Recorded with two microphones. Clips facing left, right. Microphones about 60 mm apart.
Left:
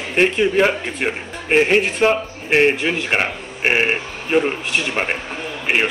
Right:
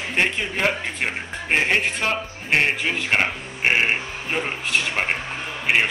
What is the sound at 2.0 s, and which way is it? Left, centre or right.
Speech, left.